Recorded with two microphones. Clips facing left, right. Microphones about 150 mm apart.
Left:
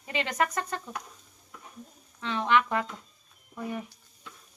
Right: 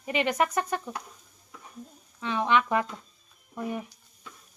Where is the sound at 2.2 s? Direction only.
15° right (ahead or behind).